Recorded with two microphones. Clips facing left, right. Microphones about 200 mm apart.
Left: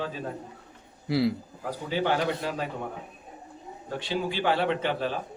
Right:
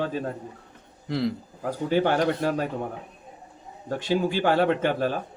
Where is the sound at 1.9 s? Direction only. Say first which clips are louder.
Right 4 dB; 50° right (ahead or behind).